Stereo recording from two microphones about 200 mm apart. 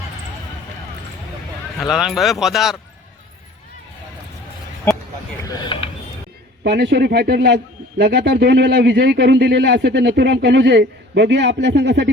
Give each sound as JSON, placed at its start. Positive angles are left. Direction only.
{"t": 1.8, "sound": "speech", "side_deg": 0}
{"t": 5.4, "sound": "a sound", "side_deg": 20}
{"t": 6.7, "sound": "a man's voice", "side_deg": -55}